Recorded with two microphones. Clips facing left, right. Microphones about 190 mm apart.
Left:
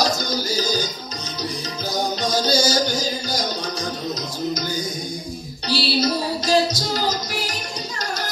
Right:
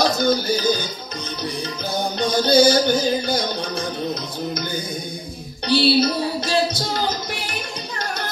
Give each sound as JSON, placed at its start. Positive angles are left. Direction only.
{"t": 0.0, "sound": "music", "side_deg": -55}
{"t": 2.0, "sound": "music", "side_deg": -55}
{"t": 5.7, "sound": "music", "side_deg": -55}